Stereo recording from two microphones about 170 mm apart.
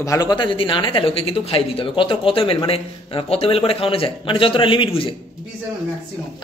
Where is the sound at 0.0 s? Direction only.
20° left (ahead or behind).